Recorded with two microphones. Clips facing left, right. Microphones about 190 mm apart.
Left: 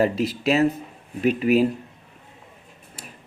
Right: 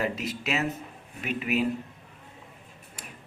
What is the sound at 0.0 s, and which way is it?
Speech, 35° left (ahead or behind).